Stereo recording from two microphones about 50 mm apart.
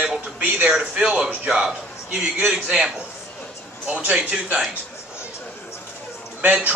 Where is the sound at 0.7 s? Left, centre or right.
Centre.